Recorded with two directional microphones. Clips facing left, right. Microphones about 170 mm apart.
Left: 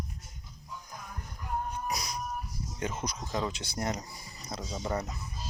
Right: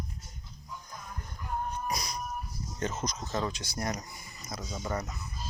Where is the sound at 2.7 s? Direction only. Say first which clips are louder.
Right 1 dB; 10° left (ahead or behind); by 5.1 s 30° left (ahead or behind).